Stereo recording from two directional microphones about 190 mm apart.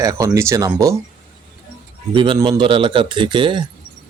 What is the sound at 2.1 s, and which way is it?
Speech, 25° right (ahead or behind).